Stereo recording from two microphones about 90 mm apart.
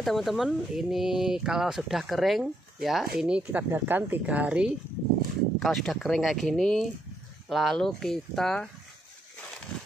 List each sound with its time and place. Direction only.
0.0 s speech: centre (ahead or behind)
5.6 s speech: centre (ahead or behind)